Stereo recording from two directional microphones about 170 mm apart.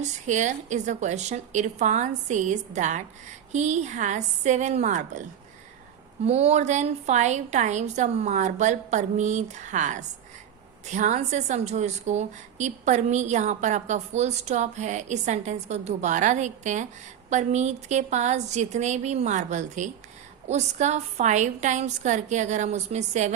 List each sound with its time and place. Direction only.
0.0 s a woman's voice: 45° right (ahead or behind)
6.2 s a woman's voice: 40° right (ahead or behind)